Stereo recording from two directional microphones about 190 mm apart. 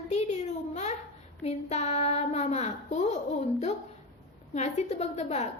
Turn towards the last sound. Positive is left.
turn(degrees=35)  # may be behind; listen again after turning